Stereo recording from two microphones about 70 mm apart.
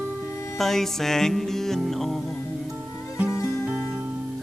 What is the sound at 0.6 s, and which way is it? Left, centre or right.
Music, centre.